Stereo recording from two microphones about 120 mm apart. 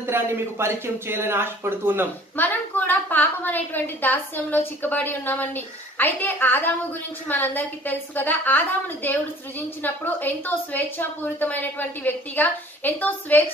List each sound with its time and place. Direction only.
0.0 s speech: 20° right (ahead or behind)
2.3 s a woman's voice: 15° left (ahead or behind)